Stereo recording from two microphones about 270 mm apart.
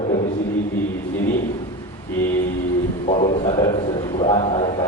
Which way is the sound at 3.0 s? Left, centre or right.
Left.